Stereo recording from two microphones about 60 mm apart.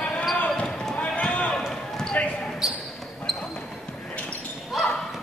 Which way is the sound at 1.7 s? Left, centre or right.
Centre.